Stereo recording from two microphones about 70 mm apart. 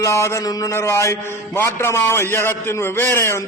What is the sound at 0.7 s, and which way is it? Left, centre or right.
A man's voice, left.